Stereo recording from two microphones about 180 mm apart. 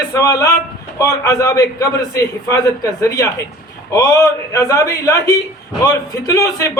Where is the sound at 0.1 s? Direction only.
20° left (ahead or behind).